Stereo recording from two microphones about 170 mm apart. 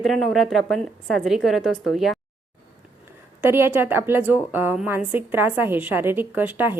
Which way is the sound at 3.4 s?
15° right (ahead or behind).